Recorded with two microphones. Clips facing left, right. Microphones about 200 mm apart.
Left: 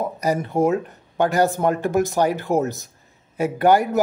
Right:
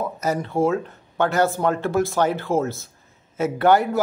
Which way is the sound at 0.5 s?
20° left (ahead or behind).